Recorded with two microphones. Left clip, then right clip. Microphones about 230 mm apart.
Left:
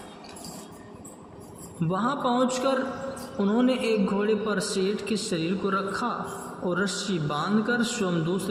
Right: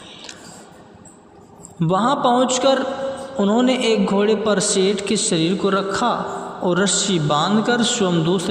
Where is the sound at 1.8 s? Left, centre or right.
Right.